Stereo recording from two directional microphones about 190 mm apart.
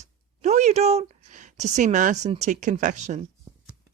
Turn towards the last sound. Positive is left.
turn(degrees=-40)  # may be behind; listen again after turning